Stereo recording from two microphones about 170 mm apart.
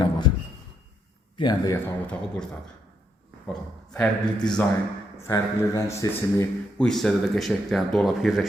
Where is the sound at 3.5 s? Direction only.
5° left (ahead or behind).